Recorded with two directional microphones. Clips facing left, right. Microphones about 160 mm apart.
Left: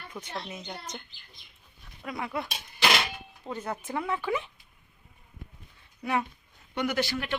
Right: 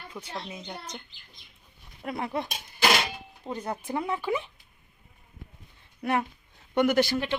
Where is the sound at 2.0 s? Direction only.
30° right (ahead or behind).